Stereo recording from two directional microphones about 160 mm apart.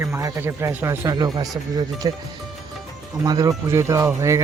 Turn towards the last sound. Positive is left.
turn(degrees=-20)  # may be behind; listen again after turning